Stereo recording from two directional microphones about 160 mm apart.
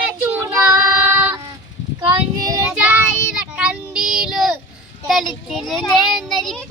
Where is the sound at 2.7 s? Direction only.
10° right (ahead or behind).